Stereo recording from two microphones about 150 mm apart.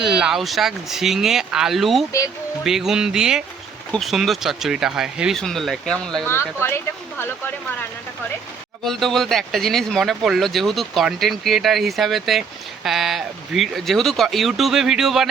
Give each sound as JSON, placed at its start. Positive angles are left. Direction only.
{"t": 0.0, "sound": "speech", "side_deg": -5}
{"t": 6.6, "sound": "speech", "side_deg": 15}
{"t": 8.8, "sound": "speech", "side_deg": 0}